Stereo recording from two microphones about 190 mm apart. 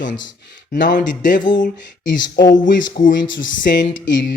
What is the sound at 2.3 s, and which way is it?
Speech, 45° left (ahead or behind).